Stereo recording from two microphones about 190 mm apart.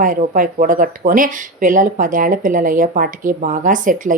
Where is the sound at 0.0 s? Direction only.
45° right (ahead or behind).